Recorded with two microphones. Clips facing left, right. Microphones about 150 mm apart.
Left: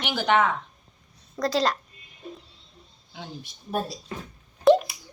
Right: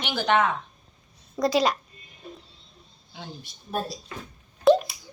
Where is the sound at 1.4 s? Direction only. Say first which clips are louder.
Right 2 dB; 20° right (ahead or behind).